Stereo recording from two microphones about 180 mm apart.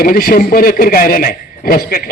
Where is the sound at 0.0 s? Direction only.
55° left (ahead or behind).